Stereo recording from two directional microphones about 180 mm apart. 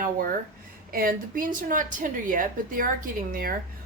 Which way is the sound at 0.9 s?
50° right (ahead or behind).